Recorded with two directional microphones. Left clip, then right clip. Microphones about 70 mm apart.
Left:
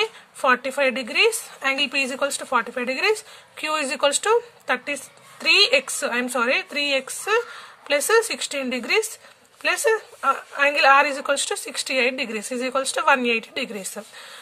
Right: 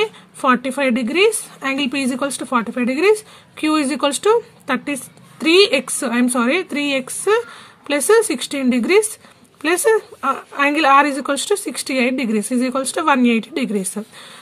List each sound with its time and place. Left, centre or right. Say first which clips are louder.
0.0 s speech: right 4 dB; right
4.6 s speech: right 2 dB; right